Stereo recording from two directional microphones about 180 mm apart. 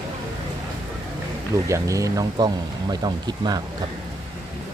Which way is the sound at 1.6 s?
15° right (ahead or behind).